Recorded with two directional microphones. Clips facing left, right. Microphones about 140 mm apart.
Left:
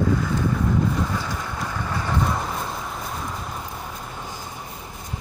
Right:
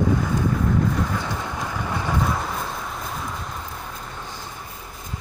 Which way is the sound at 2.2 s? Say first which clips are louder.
Even; centre (ahead or behind).